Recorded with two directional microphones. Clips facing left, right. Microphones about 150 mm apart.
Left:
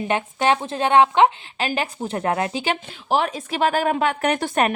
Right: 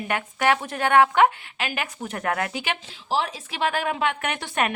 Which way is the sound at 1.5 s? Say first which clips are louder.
Left 5 dB; 35° left (ahead or behind).